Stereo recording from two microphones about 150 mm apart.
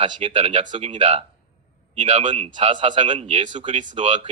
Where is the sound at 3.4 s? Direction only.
35° right (ahead or behind).